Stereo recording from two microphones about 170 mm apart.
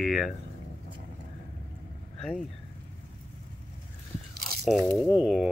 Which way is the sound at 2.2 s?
Centre (ahead or behind).